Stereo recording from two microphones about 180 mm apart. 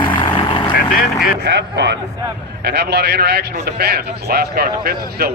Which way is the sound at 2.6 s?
65° right (ahead or behind).